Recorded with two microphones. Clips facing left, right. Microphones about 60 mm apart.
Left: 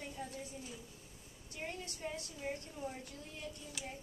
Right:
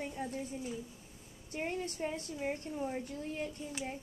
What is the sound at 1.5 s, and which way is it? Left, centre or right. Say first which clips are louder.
A woman's voice: right 8 dB; right.